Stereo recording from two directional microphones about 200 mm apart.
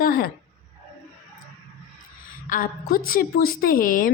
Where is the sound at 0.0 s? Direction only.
45° left (ahead or behind).